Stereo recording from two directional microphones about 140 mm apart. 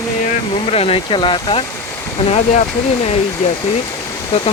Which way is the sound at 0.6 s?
45° left (ahead or behind).